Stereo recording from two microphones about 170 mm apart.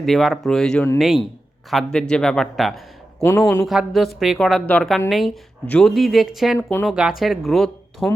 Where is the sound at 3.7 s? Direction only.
Centre (ahead or behind).